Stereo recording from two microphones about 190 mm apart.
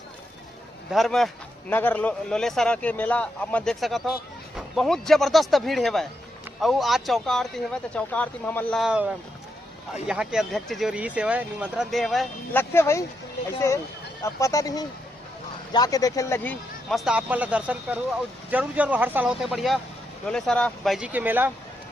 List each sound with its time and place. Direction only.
0.9 s speech: centre (ahead or behind)
8.8 s speech: 5° right (ahead or behind)
12.5 s speech: 15° left (ahead or behind)
14.3 s speech: 15° left (ahead or behind); by 21.5 s 10° right (ahead or behind)